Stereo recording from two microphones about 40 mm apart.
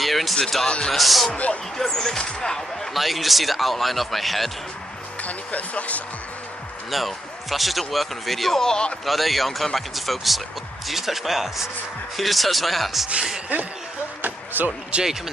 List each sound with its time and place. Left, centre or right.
0.0 s speech: centre
0.7 s a man's voice: left
0.9 s speech: centre
1.3 s a man's voice: left
1.8 s speech: centre
2.9 s speech: centre
5.2 s speech: left
6.9 s speech: centre
8.6 s a man's voice: left
9.0 s speech: centre
14.2 s a sound: right
14.9 s speech: right